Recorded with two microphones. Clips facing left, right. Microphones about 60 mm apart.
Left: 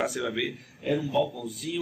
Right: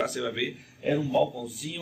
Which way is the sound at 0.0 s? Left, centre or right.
Centre.